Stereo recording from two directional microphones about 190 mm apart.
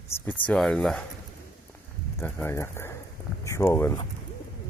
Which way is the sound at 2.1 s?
10° left (ahead or behind).